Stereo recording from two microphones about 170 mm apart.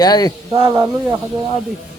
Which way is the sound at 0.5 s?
25° right (ahead or behind).